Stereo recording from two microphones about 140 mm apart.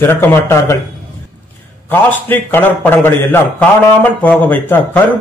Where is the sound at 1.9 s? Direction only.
15° left (ahead or behind).